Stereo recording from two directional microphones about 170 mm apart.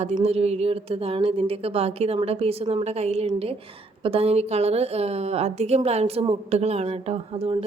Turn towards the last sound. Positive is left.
turn(degrees=-35)  # may be behind; listen again after turning